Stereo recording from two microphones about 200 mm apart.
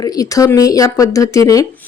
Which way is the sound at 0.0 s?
15° left (ahead or behind).